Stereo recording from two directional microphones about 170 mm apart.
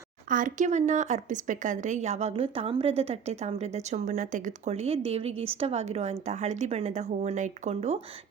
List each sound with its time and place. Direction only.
0.3 s speech: 50° right (ahead or behind)